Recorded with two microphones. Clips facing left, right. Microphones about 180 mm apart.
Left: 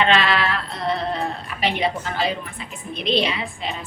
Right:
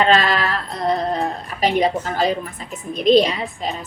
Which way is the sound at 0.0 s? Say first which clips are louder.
Right 2 dB; 40° right (ahead or behind).